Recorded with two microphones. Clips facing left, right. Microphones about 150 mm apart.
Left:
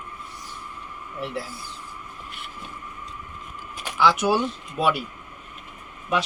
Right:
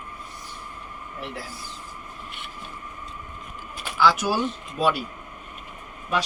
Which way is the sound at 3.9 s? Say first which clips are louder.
Left 1 dB; 20° left (ahead or behind).